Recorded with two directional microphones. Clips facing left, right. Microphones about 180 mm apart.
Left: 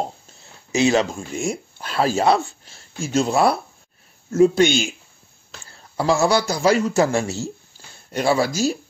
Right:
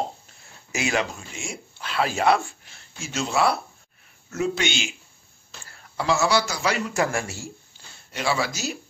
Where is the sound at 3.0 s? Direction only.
50° left (ahead or behind).